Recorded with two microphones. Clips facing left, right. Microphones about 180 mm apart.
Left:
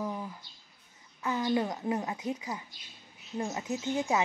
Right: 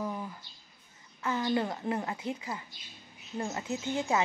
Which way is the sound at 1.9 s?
15° left (ahead or behind).